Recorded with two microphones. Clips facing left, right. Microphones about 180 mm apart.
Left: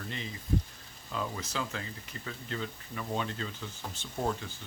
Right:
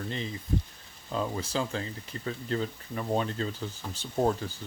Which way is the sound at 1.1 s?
30° right (ahead or behind).